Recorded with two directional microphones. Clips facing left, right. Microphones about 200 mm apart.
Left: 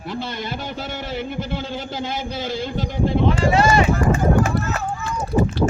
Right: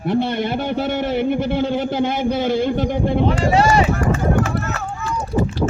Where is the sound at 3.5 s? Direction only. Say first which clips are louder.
Right 2 dB; 35° right (ahead or behind).